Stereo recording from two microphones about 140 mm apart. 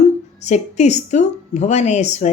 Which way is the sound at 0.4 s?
55° left (ahead or behind).